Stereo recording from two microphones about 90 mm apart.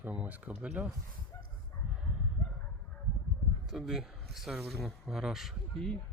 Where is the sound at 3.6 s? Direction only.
5° right (ahead or behind).